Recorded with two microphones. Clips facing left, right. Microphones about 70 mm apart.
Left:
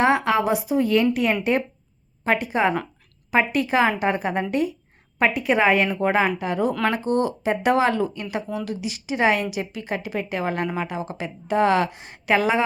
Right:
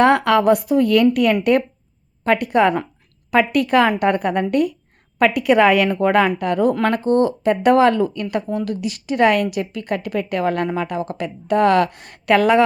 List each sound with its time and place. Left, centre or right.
0.0 s a woman's voice: right
5.2 s a woman's voice: right
7.0 s speech: right
7.4 s a woman's voice: right